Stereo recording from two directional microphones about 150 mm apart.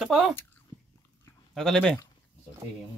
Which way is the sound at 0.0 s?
Centre (ahead or behind).